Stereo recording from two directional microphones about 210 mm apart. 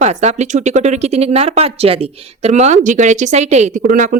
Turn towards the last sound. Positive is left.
turn(degrees=-40)  # may be behind; listen again after turning